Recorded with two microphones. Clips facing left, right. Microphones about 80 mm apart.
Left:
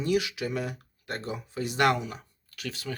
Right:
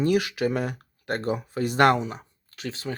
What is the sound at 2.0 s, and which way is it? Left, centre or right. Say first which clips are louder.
Speech: right 5 dB; right.